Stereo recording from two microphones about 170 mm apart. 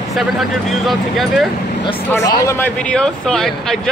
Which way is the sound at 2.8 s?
5° left (ahead or behind).